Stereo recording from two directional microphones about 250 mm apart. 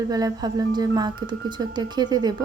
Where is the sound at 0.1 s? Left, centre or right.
Centre.